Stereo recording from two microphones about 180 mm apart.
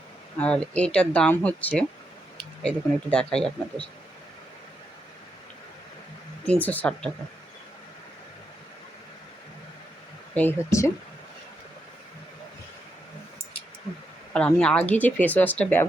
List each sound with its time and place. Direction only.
0.3 s speech: 5° left (ahead or behind)
6.4 s speech: 10° left (ahead or behind)
10.3 s speech: 15° left (ahead or behind)
14.3 s speech: 5° left (ahead or behind)